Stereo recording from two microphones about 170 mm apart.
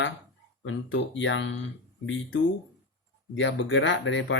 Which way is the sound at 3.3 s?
90° left.